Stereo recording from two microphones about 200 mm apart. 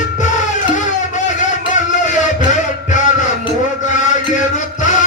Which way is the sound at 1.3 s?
40° left (ahead or behind).